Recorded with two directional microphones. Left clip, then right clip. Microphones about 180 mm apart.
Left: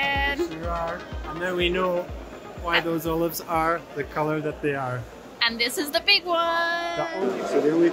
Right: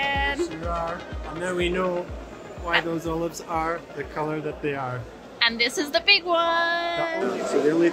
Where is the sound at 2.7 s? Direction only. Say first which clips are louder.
Left 1 dB; 60° left (ahead or behind).